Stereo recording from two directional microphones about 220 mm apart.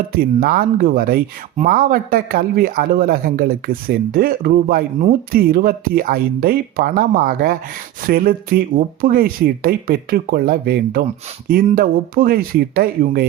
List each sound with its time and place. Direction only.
0.1 s speech: 45° right (ahead or behind)